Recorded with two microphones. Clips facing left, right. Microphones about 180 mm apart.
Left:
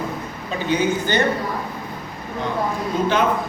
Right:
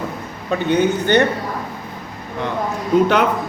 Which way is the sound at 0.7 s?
60° right (ahead or behind).